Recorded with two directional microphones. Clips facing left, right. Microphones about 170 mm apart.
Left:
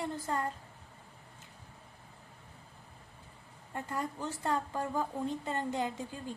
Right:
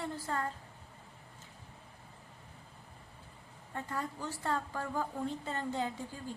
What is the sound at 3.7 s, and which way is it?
A woman's voice, 15° left (ahead or behind).